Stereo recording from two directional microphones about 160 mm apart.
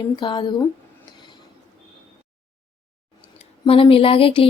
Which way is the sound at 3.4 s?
35° left (ahead or behind).